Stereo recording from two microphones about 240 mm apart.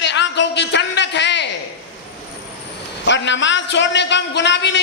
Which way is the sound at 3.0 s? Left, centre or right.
Left.